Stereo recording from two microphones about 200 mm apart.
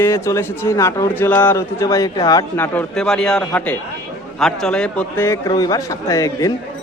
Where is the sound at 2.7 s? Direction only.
5° left (ahead or behind).